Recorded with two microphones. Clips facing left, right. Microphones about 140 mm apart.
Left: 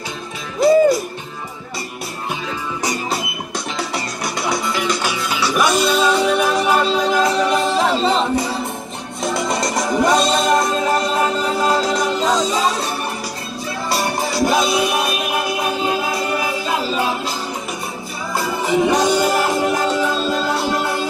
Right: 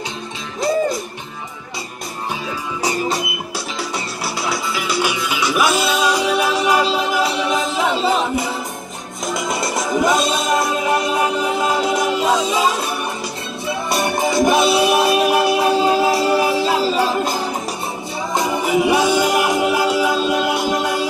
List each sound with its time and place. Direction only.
3.5 s music: 5° right (ahead or behind)
9.2 s music: centre (ahead or behind)
13.8 s music: 20° right (ahead or behind)
18.3 s music: 15° right (ahead or behind)